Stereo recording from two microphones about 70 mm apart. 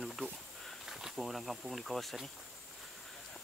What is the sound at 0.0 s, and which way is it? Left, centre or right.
Insect, centre.